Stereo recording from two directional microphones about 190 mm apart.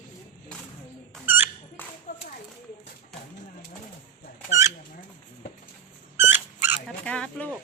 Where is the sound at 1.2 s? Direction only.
10° right (ahead or behind).